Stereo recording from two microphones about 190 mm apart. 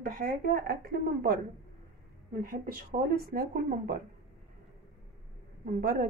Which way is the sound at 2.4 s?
50° right (ahead or behind).